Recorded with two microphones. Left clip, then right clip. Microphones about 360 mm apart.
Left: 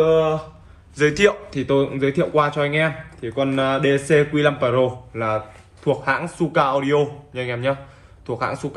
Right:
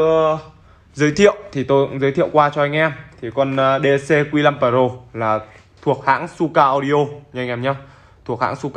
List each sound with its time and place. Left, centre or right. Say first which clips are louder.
0.0 s a man's voice: right 2 dB; centre